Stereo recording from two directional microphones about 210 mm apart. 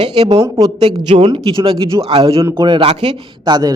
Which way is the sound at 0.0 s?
25° right (ahead or behind).